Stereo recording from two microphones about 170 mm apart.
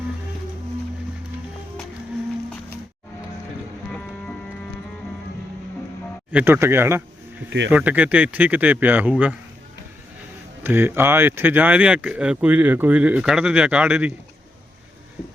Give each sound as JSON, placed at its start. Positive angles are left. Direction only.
{"t": 6.3, "sound": "speech", "side_deg": -10}
{"t": 10.6, "sound": "speech", "side_deg": -10}